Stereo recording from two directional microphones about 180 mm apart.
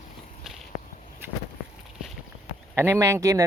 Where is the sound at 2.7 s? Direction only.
15° right (ahead or behind).